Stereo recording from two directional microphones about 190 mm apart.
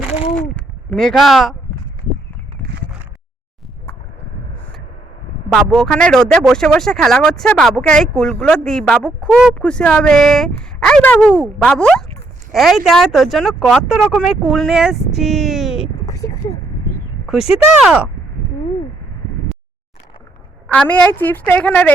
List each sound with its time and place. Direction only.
0.3 s speech: 5° left (ahead or behind)
5.5 s speech: centre (ahead or behind)
16.0 s a sound: 15° left (ahead or behind)
17.7 s speech: 5° right (ahead or behind)
20.7 s a woman's voice: 5° left (ahead or behind)